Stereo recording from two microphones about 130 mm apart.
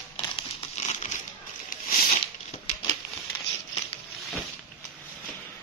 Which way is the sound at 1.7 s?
90° left.